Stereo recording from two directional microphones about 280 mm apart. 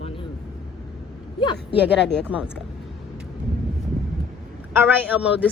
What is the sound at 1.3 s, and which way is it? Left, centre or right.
Speech, centre.